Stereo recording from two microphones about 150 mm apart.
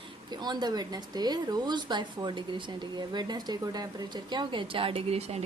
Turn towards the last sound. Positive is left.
turn(degrees=-45)  # may be behind; listen again after turning